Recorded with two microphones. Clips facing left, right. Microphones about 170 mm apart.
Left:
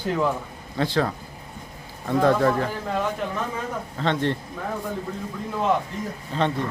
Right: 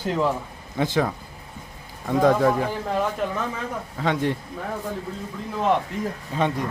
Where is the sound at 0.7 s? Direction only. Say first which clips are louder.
Right 1 dB; 15° right (ahead or behind).